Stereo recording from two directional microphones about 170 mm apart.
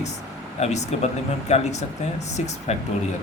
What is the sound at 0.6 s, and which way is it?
Speech, 40° left (ahead or behind).